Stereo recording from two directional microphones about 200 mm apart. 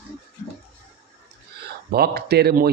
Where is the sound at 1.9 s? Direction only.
50° right (ahead or behind).